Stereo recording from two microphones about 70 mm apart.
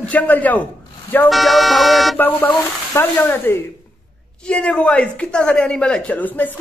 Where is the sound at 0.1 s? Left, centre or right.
Left.